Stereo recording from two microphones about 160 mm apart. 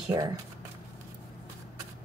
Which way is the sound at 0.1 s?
25° right (ahead or behind).